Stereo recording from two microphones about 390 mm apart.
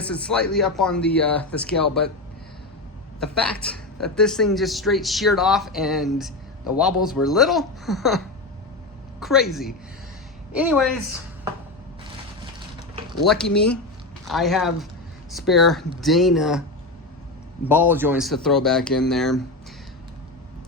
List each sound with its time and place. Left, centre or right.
0.0 s a man's voice: centre
3.2 s a man's voice: centre
9.2 s a man's voice: centre
12.5 s a sound: centre
13.2 s a man's voice: centre
17.7 s a man's voice: centre